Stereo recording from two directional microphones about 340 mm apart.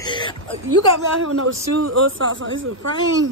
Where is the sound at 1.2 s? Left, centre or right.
Right.